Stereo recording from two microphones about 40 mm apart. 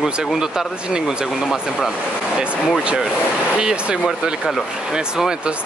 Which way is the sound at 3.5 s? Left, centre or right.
Right.